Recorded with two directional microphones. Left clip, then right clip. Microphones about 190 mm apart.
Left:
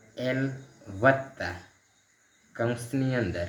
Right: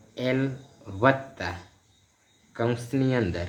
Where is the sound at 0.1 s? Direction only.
40° right (ahead or behind).